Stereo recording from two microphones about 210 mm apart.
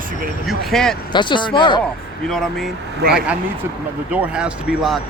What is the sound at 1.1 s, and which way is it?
Speech, 20° left (ahead or behind).